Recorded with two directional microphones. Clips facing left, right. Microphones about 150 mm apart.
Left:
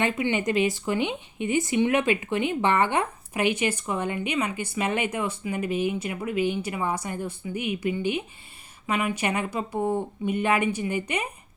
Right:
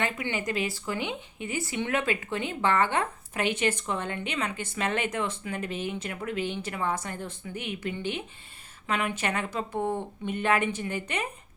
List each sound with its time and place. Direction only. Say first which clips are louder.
0.0 s speech: left 6 dB; 20° left (ahead or behind)